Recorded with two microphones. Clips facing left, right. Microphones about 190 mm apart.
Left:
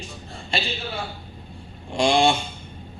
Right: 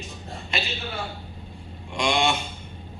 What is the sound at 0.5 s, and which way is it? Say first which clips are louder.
Speech: left 3 dB; 30° left (ahead or behind).